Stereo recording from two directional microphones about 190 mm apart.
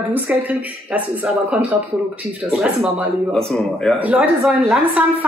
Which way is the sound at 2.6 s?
5° right (ahead or behind).